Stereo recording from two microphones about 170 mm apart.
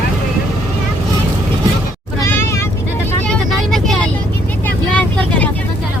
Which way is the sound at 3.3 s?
Centre (ahead or behind).